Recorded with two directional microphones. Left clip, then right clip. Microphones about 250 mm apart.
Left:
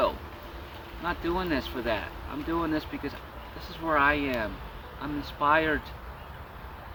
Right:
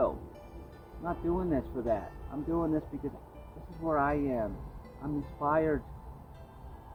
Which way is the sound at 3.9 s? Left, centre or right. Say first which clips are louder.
Left 5 dB; centre.